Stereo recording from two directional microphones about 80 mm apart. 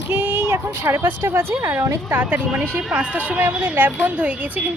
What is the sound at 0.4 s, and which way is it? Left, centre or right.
Speech, right.